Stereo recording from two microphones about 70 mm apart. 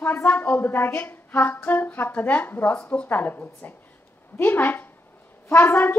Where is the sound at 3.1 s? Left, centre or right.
Left.